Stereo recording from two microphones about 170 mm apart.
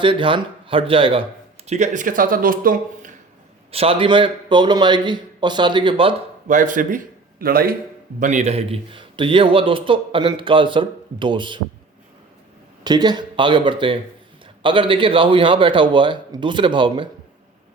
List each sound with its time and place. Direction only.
0.0 s speech: 30° right (ahead or behind)
1.6 s speech: 40° right (ahead or behind)
3.7 s a man's voice: 35° right (ahead or behind)
6.5 s a man's voice: 50° right (ahead or behind)
8.2 s a man's voice: 45° right (ahead or behind)
12.8 s a man's voice: 25° right (ahead or behind)